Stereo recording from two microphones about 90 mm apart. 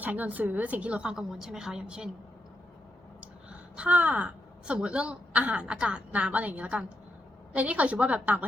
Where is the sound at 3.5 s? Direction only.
15° right (ahead or behind).